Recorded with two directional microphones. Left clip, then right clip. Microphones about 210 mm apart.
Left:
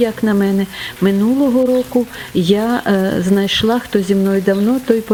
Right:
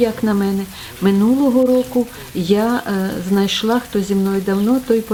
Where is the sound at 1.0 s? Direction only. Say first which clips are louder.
Left 1 dB; 30° left (ahead or behind).